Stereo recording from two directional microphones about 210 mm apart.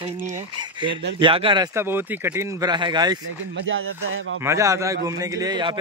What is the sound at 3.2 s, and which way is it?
Speech, 70° right (ahead or behind).